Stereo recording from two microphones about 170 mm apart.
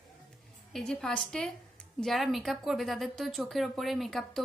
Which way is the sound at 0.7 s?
5° left (ahead or behind).